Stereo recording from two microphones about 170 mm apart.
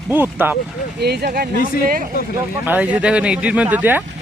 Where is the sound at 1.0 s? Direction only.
70° right (ahead or behind).